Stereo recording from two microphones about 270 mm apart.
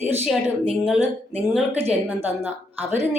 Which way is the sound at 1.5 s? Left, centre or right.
Centre.